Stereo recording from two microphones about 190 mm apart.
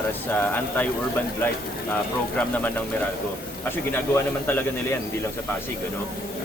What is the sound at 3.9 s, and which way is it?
Speech, 10° left (ahead or behind).